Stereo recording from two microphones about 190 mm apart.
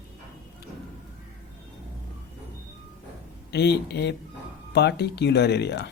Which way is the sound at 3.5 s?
60° left (ahead or behind).